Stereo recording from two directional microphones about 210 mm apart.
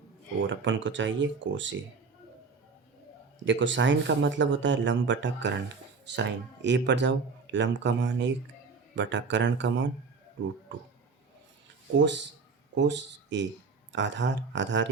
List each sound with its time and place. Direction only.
0.3 s speech: 60° right (ahead or behind)
3.4 s speech: 60° right (ahead or behind)
11.9 s speech: 60° right (ahead or behind)